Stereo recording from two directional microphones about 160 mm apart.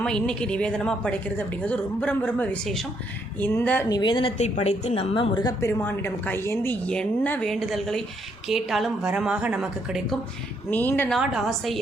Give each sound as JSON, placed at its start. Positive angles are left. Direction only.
{"t": 0.0, "sound": "a woman's voice", "side_deg": 5}
{"t": 3.8, "sound": "speech", "side_deg": 25}
{"t": 4.4, "sound": "a woman's voice", "side_deg": 45}
{"t": 5.1, "sound": "a woman's voice", "side_deg": 30}
{"t": 10.7, "sound": "a woman's voice", "side_deg": 10}
{"t": 11.1, "sound": "a woman's voice", "side_deg": 0}